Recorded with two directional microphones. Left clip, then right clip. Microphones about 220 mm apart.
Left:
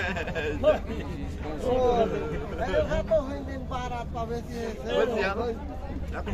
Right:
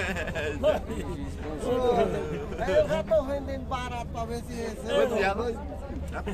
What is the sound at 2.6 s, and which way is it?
A man's voice, 50° right (ahead or behind).